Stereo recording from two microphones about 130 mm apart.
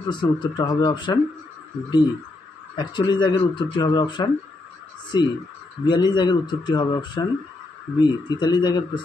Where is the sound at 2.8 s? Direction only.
35° left (ahead or behind).